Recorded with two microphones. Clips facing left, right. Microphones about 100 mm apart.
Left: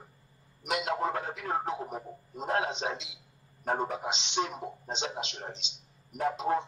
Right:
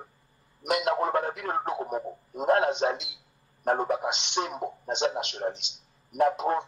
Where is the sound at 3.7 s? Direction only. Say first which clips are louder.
Right 5 dB; 60° right (ahead or behind).